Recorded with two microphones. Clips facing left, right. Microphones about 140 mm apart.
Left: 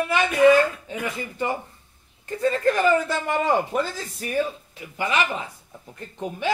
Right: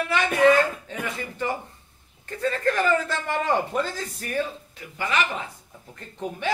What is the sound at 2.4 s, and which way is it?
A man's voice, 15° left (ahead or behind).